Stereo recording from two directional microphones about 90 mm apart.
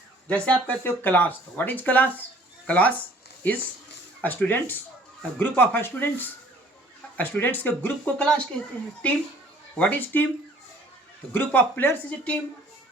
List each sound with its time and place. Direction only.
0.3 s speech: 15° left (ahead or behind)
4.2 s speech: 20° left (ahead or behind)
11.3 s speech: 20° left (ahead or behind)